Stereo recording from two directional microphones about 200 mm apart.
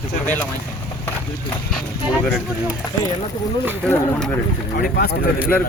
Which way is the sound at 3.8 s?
5° left (ahead or behind).